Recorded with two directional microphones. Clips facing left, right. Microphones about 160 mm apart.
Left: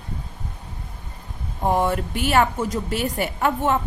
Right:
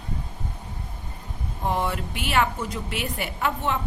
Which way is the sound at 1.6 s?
45° left (ahead or behind).